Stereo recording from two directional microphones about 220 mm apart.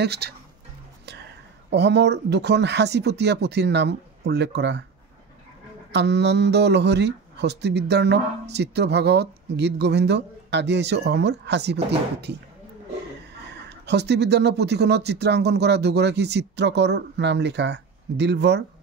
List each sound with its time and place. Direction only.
0.0 s speech: 50° right (ahead or behind)
1.7 s speech: 50° right (ahead or behind)
5.9 s speech: 50° right (ahead or behind)
13.7 s speech: 50° right (ahead or behind)